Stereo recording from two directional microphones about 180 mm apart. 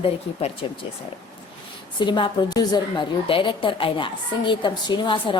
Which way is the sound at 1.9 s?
25° left (ahead or behind).